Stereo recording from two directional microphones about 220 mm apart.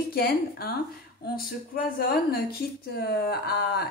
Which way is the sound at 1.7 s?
40° left (ahead or behind).